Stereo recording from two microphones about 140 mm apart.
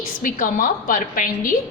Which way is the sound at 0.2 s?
75° left (ahead or behind).